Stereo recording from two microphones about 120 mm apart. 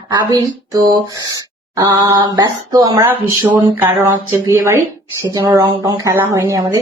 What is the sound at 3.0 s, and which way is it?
Speech, 15° right (ahead or behind).